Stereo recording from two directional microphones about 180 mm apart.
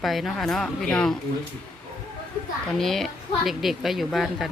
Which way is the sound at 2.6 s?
Centre (ahead or behind).